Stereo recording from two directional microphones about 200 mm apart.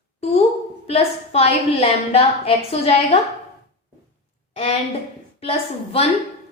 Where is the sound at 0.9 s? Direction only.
30° left (ahead or behind).